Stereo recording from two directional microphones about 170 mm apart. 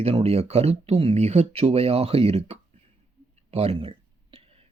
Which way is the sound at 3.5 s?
35° right (ahead or behind).